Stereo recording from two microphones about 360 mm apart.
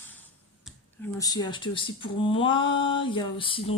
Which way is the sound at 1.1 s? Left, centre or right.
Centre.